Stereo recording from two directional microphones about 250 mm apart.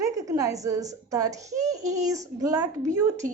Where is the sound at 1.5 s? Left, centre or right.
Right.